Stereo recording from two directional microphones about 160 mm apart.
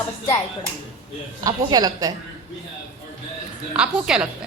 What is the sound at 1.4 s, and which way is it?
Speech, 25° right (ahead or behind).